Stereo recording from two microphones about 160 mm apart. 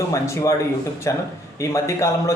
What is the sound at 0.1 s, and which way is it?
A man's voice, 20° left (ahead or behind).